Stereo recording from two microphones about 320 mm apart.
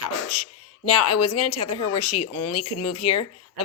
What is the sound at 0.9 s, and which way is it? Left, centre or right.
Speech, left.